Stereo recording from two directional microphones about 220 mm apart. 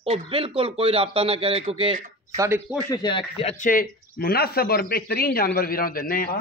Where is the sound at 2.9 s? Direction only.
20° left (ahead or behind).